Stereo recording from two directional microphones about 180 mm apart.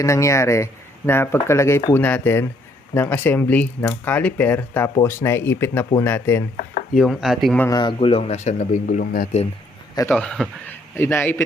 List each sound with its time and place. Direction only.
0.0 s speech: 15° left (ahead or behind)
6.9 s speech: centre (ahead or behind)
7.6 s speech: 20° left (ahead or behind); by 9.4 s 45° left (ahead or behind)
9.9 s a man's voice: 20° left (ahead or behind)
10.2 s speech: 5° left (ahead or behind)